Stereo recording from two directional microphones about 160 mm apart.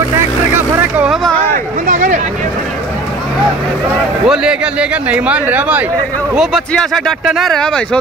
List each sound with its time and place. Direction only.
0.9 s vehicle: 5° right (ahead or behind)
1.9 s vehicle: 50° right (ahead or behind)
4.3 s a man's voice: 5° right (ahead or behind)
6.3 s speech: centre (ahead or behind)